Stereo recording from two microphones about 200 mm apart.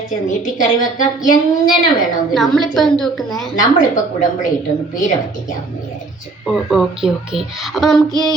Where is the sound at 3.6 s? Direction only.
40° left (ahead or behind).